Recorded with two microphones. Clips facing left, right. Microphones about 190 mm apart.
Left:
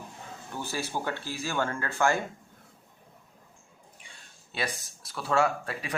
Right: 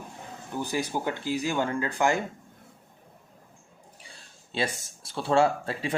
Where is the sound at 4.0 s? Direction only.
30° right (ahead or behind).